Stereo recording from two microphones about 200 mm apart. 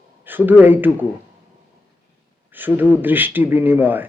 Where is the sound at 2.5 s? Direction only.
10° right (ahead or behind).